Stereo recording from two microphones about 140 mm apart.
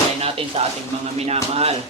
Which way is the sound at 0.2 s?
45° right (ahead or behind).